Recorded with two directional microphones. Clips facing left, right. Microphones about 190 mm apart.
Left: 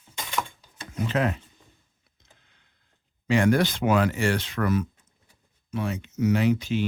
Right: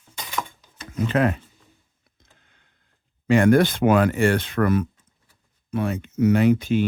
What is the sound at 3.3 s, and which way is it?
Speech, 55° right (ahead or behind).